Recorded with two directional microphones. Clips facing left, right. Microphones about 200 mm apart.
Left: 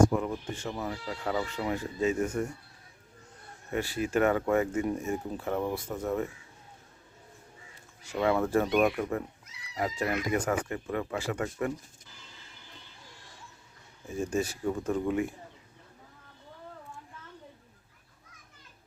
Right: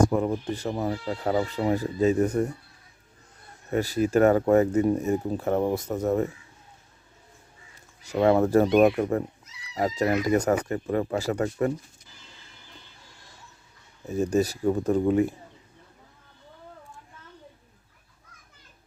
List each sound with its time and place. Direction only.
0.0 s speech: 35° right (ahead or behind)
3.7 s speech: 40° right (ahead or behind)
8.0 s speech: 40° right (ahead or behind)
14.1 s speech: 40° right (ahead or behind)